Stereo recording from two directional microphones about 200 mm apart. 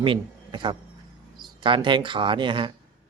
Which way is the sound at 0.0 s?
25° right (ahead or behind).